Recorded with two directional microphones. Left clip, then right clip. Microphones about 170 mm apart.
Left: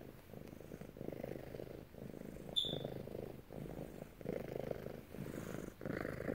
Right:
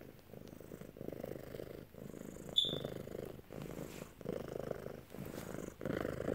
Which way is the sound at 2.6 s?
20° right (ahead or behind).